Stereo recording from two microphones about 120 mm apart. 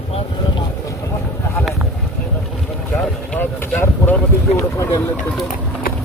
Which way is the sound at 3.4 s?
15° left (ahead or behind).